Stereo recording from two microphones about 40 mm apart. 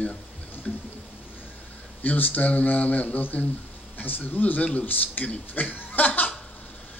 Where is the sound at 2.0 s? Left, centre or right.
Left.